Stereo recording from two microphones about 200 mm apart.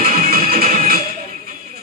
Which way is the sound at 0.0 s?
45° right (ahead or behind).